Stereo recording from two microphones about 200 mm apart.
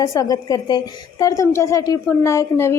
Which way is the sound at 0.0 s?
15° left (ahead or behind).